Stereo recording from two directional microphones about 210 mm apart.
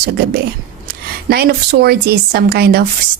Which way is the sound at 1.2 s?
45° right (ahead or behind).